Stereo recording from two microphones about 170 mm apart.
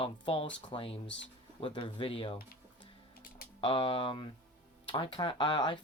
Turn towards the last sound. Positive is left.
turn(degrees=30)  # may be behind; listen again after turning